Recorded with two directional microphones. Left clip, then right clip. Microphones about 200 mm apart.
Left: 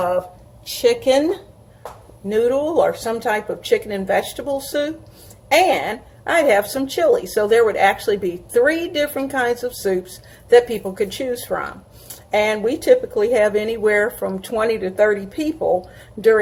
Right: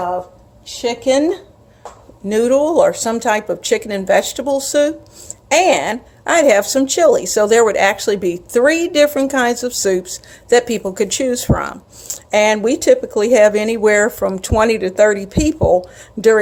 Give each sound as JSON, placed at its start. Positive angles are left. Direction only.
{"t": 1.0, "sound": "speech", "side_deg": -30}
{"t": 2.3, "sound": "a woman's voice", "side_deg": -55}